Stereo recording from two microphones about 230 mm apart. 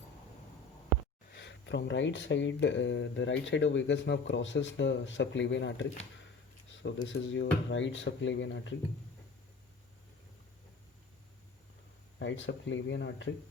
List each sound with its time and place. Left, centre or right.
1.3 s speech: left
6.8 s speech: left
12.2 s speech: left